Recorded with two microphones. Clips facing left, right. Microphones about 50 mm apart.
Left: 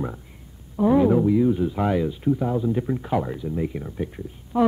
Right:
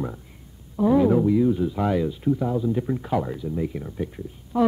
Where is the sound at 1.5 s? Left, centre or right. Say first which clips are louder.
Left 1 dB; left.